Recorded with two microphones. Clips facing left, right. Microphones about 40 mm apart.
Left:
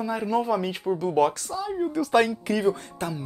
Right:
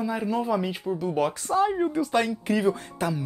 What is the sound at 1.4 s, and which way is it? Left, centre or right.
Speech, right.